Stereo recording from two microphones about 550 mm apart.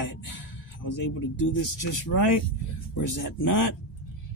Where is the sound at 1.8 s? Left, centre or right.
Left.